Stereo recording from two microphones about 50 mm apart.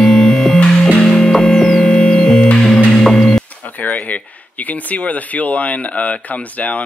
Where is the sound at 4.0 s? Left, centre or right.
Left.